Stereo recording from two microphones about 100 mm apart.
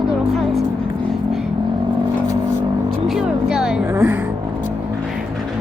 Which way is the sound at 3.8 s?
20° right (ahead or behind).